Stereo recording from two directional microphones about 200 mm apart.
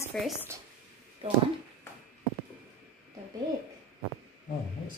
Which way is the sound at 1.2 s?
30° right (ahead or behind).